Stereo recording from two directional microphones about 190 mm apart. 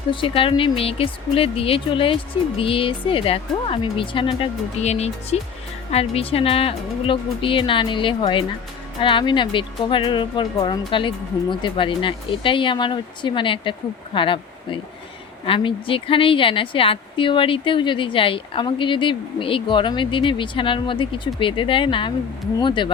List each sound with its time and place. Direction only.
0.1 s a woman's voice: 25° left (ahead or behind)